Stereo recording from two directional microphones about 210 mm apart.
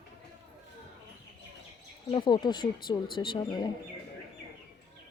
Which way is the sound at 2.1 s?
20° left (ahead or behind).